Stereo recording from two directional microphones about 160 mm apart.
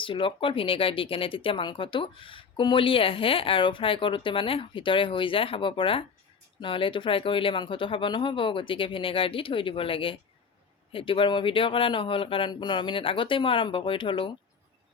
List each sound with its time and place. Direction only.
0.0 s speech: 30° left (ahead or behind)